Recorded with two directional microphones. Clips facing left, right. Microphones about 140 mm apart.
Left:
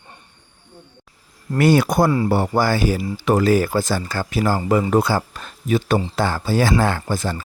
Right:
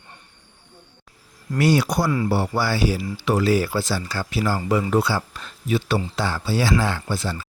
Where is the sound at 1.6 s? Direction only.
55° left (ahead or behind).